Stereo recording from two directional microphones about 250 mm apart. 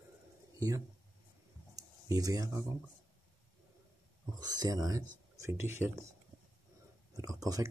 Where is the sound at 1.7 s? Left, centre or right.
Centre.